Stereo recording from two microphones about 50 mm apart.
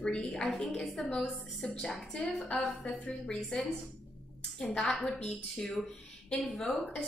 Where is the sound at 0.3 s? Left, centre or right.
Centre.